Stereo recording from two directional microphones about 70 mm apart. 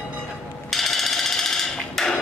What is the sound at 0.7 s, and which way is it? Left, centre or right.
Hammer, centre.